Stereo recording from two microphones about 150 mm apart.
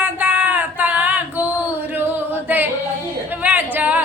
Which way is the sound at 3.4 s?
10° right (ahead or behind).